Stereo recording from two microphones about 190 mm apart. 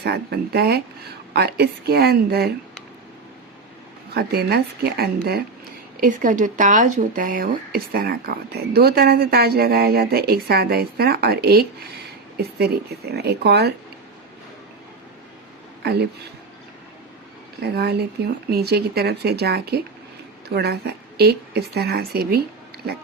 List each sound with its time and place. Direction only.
0.0 s speech: 55° right (ahead or behind)
4.1 s speech: 55° right (ahead or behind)
6.0 s speech: 40° right (ahead or behind); by 13.7 s 60° right (ahead or behind)
15.8 s speech: 60° right (ahead or behind)
17.6 s speech: 55° right (ahead or behind)